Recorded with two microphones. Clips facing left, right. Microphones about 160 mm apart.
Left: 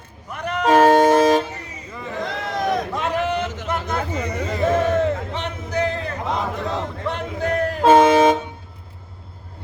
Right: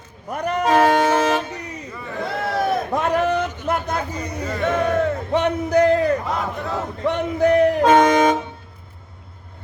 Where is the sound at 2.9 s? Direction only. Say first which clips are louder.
Right 3 dB; 50° right (ahead or behind).